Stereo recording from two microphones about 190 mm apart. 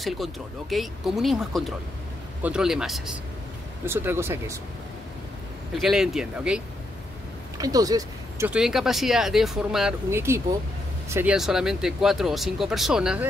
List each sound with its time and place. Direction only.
0.0 s speech: centre (ahead or behind)
5.8 s speech: centre (ahead or behind)
7.5 s speech: 20° right (ahead or behind)
8.5 s speech: 5° right (ahead or behind)
11.3 s speech: centre (ahead or behind)